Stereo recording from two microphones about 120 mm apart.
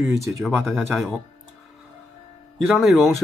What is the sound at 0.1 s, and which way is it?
Speech, 25° right (ahead or behind).